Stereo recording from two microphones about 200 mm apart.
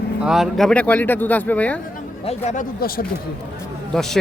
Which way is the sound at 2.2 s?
40° left (ahead or behind).